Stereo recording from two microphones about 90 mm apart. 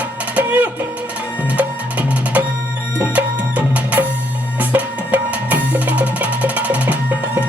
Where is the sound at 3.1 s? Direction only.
20° right (ahead or behind).